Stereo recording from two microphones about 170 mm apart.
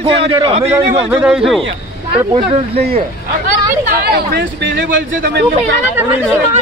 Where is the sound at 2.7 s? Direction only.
70° right (ahead or behind).